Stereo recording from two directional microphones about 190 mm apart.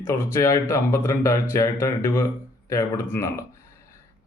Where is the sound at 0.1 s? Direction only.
15° left (ahead or behind).